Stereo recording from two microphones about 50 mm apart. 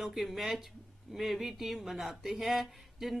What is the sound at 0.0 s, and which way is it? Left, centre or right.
Speech, centre.